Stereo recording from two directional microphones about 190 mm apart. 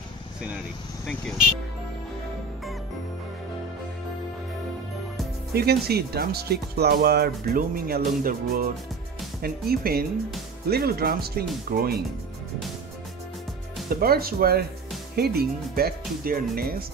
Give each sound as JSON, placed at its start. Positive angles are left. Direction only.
{"t": 5.5, "sound": "speech", "side_deg": -55}
{"t": 13.8, "sound": "speech", "side_deg": -55}